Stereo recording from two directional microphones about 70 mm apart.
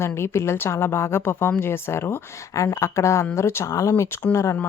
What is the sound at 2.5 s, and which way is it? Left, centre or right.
Speech, left.